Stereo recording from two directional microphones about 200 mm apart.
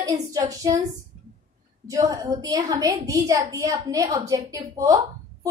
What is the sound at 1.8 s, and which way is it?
A woman's voice, 15° right (ahead or behind).